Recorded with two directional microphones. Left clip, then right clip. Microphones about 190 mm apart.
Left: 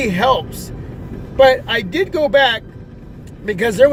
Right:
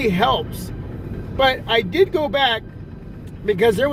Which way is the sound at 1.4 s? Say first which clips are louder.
Left 5 dB; 30° left (ahead or behind).